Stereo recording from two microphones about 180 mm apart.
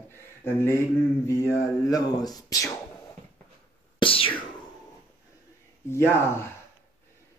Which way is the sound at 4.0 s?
30° left (ahead or behind).